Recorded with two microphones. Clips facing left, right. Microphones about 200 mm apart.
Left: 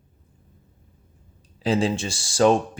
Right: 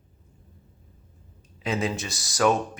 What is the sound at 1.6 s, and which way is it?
Speech, 30° left (ahead or behind).